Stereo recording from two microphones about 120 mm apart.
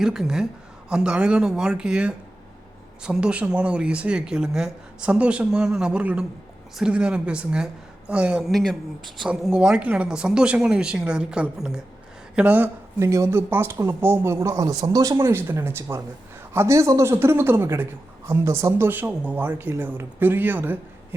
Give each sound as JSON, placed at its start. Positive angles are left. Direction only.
{"t": 0.0, "sound": "a woman's voice", "side_deg": -5}